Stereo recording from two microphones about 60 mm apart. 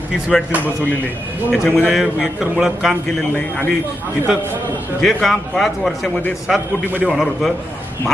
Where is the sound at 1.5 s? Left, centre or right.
Centre.